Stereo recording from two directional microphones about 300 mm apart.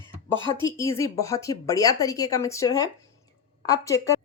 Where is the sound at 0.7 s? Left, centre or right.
Centre.